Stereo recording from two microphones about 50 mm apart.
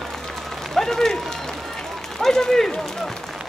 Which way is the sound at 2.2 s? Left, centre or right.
Centre.